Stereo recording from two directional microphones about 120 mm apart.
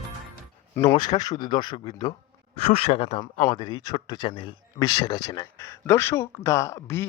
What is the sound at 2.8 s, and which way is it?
Speech, 55° left (ahead or behind).